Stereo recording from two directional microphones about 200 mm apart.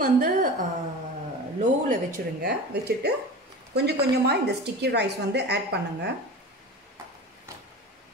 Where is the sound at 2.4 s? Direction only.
55° right (ahead or behind).